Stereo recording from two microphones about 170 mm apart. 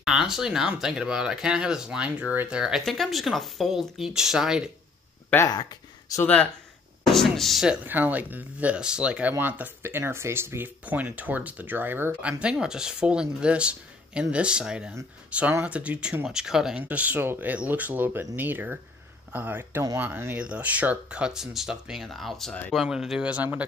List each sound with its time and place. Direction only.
0.0 s speech: 5° right (ahead or behind)
5.3 s speech: 20° left (ahead or behind)
6.2 s speech: 10° left (ahead or behind); by 23.6 s 10° right (ahead or behind)